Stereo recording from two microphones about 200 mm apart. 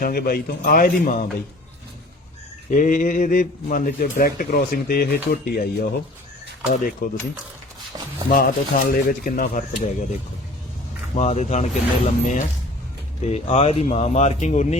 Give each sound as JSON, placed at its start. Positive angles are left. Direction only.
{"t": 0.0, "sound": "speech", "side_deg": 45}
{"t": 2.6, "sound": "speech", "side_deg": 40}
{"t": 8.3, "sound": "speech", "side_deg": 45}
{"t": 11.1, "sound": "speech", "side_deg": 35}